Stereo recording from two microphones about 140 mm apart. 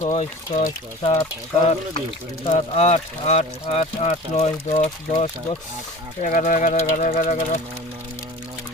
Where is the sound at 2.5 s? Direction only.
50° left (ahead or behind).